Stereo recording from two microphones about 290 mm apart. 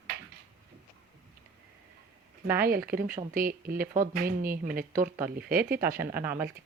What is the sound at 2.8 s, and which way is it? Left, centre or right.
Speech, right.